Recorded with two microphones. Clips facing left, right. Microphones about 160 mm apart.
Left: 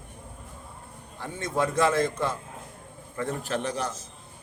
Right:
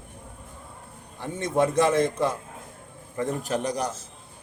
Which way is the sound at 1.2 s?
20° right (ahead or behind).